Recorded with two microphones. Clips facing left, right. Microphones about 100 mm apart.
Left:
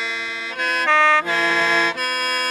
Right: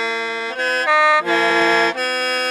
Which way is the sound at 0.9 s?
10° right (ahead or behind).